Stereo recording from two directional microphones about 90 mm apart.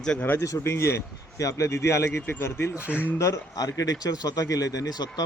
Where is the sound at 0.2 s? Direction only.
25° left (ahead or behind).